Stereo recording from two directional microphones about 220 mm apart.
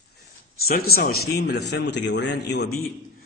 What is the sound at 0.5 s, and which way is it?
A man's voice, 45° left (ahead or behind).